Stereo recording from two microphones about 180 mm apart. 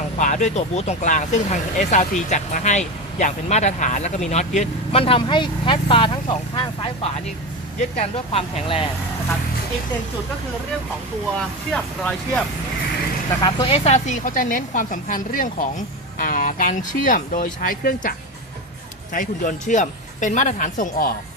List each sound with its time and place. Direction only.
0.2 s speech: 45° left (ahead or behind)
11.3 s speech: 5° left (ahead or behind)
13.4 s speech: 30° left (ahead or behind); by 18.1 s 50° left (ahead or behind)
19.1 s speech: 50° left (ahead or behind)